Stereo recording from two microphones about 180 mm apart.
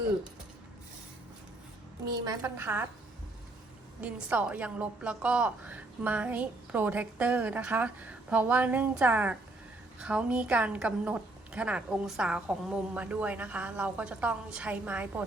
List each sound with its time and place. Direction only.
2.0 s a woman's voice: 20° right (ahead or behind)
4.0 s a woman's voice: 5° right (ahead or behind)